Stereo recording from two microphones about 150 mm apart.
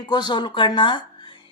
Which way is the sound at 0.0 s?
30° left (ahead or behind).